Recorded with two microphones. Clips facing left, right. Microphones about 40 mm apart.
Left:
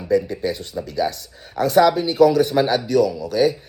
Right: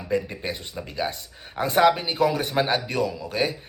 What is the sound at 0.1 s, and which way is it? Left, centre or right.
Speech, right.